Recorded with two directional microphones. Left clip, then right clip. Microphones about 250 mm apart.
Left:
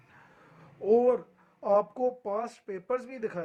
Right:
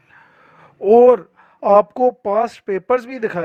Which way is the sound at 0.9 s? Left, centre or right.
Right.